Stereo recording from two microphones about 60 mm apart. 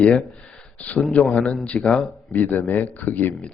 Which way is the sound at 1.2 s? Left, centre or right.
Centre.